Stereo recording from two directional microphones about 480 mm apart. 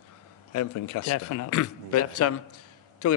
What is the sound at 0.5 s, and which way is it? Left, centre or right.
A man's voice, left.